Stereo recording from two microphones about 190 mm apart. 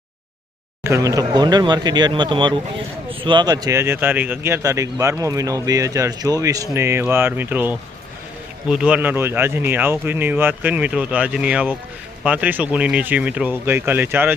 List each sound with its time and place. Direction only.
0.9 s speech: 15° right (ahead or behind)